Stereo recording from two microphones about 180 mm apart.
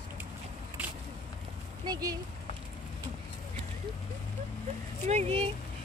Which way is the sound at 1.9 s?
20° right (ahead or behind).